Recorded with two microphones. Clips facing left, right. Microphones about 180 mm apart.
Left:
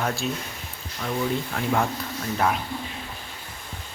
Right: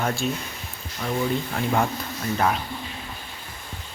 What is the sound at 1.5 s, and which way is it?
Speech, 5° right (ahead or behind).